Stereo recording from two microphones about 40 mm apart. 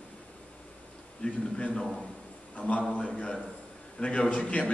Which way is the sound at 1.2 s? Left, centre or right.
Left.